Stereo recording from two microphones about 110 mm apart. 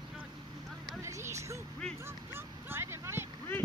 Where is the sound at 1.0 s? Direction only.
25° right (ahead or behind).